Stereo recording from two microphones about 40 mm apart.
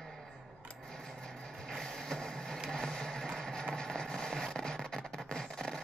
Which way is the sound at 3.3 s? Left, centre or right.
Centre.